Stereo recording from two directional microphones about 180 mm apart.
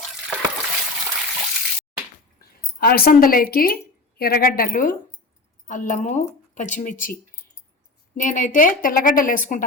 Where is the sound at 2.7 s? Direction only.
55° left (ahead or behind).